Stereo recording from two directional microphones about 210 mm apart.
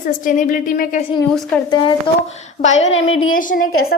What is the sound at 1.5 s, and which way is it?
Speech, 5° left (ahead or behind).